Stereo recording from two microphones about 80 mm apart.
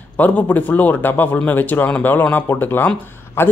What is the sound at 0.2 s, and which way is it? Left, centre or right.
Speech, left.